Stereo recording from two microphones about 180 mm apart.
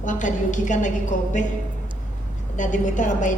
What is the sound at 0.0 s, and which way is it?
Speech, 45° left (ahead or behind).